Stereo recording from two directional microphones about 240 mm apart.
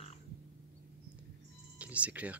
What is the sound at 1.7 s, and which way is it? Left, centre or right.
Speech, centre.